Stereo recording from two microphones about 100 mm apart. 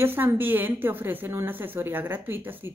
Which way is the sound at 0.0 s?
20° right (ahead or behind).